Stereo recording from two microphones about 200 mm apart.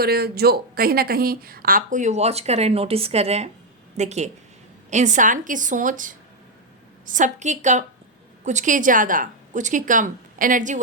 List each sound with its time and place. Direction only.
0.0 s speech: 50° right (ahead or behind)